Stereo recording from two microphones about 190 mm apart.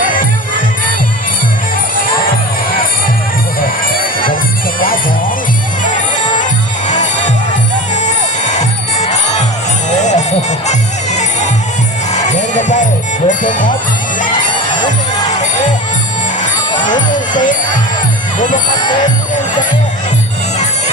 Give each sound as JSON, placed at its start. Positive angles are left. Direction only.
{"t": 4.8, "sound": "music", "side_deg": 50}
{"t": 8.5, "sound": "music", "side_deg": 35}
{"t": 10.0, "sound": "a sound", "side_deg": 40}
{"t": 11.2, "sound": "music", "side_deg": 40}
{"t": 17.1, "sound": "music", "side_deg": 45}